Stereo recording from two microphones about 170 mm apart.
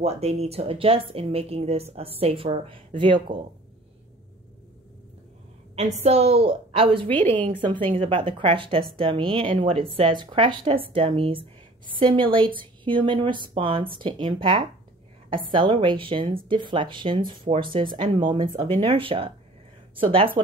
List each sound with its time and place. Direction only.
0.0 s a woman's voice: 40° right (ahead or behind)
5.8 s a woman's voice: 40° right (ahead or behind)
7.1 s a woman's voice: 10° left (ahead or behind)
7.7 s a woman's voice: 30° right (ahead or behind)